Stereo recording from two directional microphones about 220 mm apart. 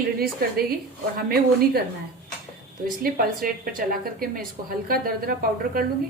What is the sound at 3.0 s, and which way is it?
A woman's voice, 40° right (ahead or behind).